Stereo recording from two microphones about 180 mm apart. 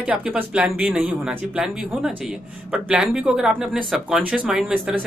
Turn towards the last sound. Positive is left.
turn(degrees=-5)  # may be behind; listen again after turning